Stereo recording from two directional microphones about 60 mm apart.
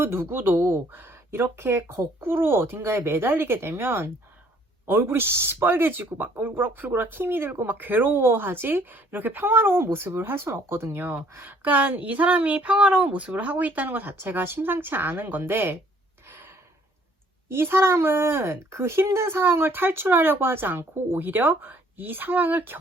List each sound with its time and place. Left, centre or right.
0.0 s speech: right
11.4 s a woman's voice: right
17.5 s speech: right